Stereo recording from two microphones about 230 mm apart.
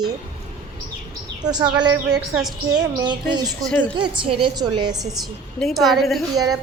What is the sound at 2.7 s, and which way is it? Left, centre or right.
Speech, centre.